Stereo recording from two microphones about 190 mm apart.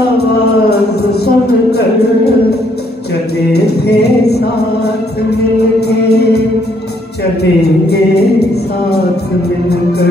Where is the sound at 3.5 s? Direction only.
60° left (ahead or behind).